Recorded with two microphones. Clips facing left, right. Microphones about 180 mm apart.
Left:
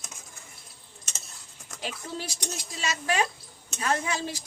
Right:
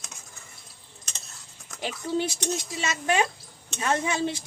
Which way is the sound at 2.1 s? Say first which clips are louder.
Right 9 dB; 25° right (ahead or behind).